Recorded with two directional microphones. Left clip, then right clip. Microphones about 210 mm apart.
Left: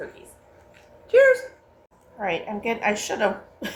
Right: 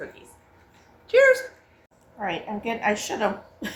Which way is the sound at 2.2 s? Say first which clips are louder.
Left 3 dB; 20° left (ahead or behind).